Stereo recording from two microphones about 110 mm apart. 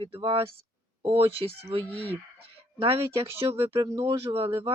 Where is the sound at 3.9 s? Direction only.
55° right (ahead or behind).